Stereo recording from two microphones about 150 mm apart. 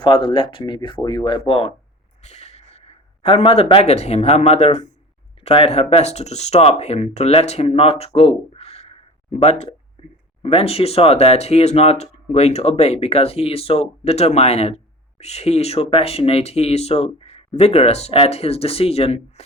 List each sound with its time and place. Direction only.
0.0 s speech: 35° left (ahead or behind)
2.2 s speech: 50° left (ahead or behind)